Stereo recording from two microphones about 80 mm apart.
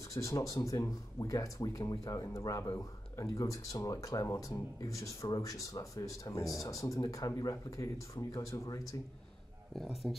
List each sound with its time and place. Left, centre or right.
0.1 s speech: left
2.2 s speech: left
10.0 s speech: centre